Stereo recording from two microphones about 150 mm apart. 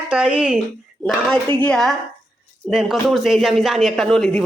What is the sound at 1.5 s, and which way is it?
Speech, 5° left (ahead or behind).